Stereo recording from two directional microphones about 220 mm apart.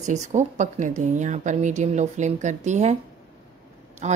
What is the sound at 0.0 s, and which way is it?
A woman's voice, 35° right (ahead or behind).